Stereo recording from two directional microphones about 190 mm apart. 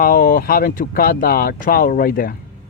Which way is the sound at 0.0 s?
50° left (ahead or behind).